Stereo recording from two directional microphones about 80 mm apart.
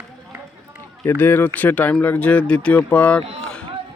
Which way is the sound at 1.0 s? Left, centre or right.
Left.